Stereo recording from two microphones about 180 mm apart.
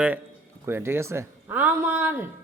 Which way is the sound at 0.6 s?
15° right (ahead or behind).